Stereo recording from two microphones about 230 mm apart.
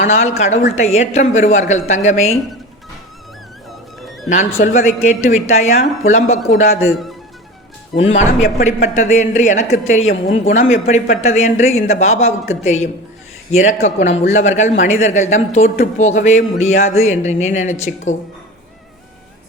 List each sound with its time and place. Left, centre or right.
0.0 s a man's voice: left
4.3 s a man's voice: left
7.9 s a man's voice: left